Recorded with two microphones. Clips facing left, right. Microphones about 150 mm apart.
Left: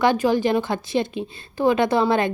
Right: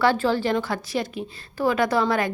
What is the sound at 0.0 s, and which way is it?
A woman's voice, 15° left (ahead or behind).